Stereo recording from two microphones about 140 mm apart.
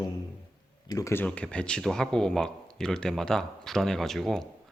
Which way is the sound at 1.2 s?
10° left (ahead or behind).